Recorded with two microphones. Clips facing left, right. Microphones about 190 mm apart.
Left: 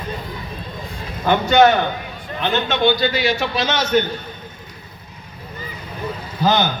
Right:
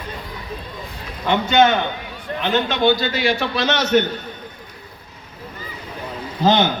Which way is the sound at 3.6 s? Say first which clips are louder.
Right 1 dB; 70° right (ahead or behind).